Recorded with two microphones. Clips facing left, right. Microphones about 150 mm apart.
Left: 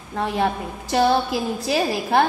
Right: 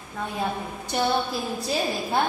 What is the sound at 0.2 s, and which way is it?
A woman's voice, 85° left.